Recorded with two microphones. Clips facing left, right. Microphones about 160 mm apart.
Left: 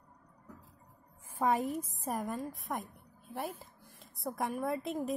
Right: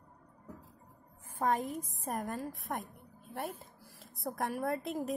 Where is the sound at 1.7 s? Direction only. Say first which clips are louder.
Left 2 dB; centre (ahead or behind).